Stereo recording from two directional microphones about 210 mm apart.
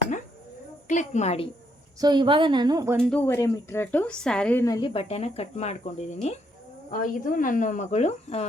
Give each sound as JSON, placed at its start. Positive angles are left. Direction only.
{"t": 0.9, "sound": "a woman's voice", "side_deg": 35}
{"t": 2.0, "sound": "a woman's voice", "side_deg": -20}
{"t": 3.0, "sound": "a woman's voice", "side_deg": 5}